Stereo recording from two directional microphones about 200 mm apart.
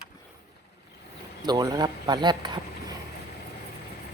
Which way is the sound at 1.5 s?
20° right (ahead or behind).